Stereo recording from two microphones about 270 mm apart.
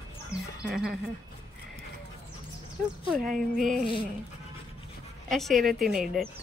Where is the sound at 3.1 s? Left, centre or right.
Centre.